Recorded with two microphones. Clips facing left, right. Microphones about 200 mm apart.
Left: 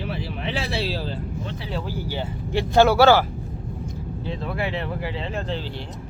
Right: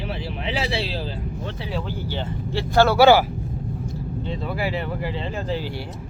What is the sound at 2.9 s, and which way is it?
Speech, 10° right (ahead or behind).